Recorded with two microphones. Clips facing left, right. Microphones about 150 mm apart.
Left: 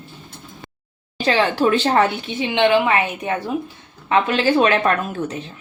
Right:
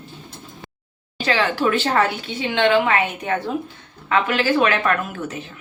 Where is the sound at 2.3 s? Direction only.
15° left (ahead or behind).